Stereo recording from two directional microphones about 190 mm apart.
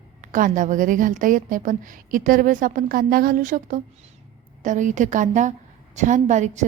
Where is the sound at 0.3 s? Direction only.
45° right (ahead or behind).